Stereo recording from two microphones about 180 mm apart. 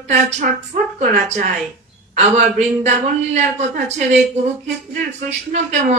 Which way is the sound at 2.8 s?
40° right (ahead or behind).